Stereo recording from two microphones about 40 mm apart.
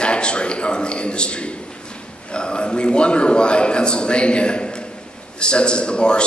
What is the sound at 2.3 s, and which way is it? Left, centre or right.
A man's voice, left.